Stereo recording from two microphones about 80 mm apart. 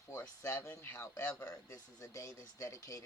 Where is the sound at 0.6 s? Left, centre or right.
Left.